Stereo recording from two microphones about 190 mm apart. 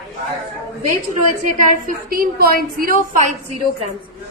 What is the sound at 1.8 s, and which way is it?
A woman's voice, 50° right (ahead or behind).